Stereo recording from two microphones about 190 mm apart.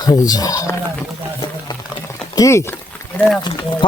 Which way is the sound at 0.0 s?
20° left (ahead or behind).